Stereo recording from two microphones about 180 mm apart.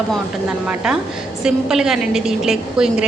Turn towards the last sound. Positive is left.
turn(degrees=-5)  # may be behind; listen again after turning